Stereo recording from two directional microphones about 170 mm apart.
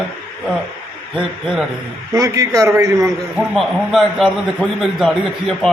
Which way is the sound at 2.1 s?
20° right (ahead or behind).